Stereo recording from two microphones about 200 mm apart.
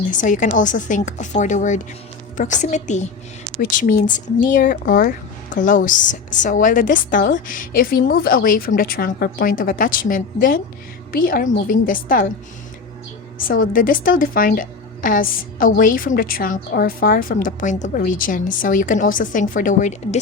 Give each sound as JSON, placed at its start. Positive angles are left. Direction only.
{"t": 0.1, "sound": "a woman's voice", "side_deg": 40}
{"t": 13.5, "sound": "a woman's voice", "side_deg": 45}